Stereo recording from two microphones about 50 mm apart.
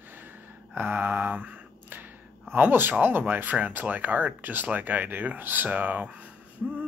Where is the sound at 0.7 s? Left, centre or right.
Right.